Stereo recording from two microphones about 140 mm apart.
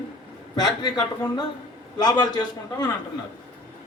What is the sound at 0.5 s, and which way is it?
A man's voice, 30° left (ahead or behind).